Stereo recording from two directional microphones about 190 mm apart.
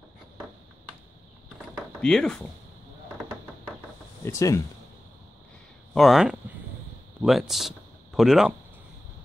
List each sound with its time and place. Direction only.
2.0 s speech: 5° left (ahead or behind)
4.2 s speech: 15° left (ahead or behind)
5.9 s speech: centre (ahead or behind)